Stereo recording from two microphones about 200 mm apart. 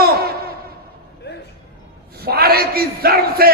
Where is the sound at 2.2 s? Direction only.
50° right (ahead or behind).